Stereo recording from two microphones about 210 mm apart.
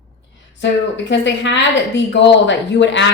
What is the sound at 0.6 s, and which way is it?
A woman's voice, 60° left (ahead or behind).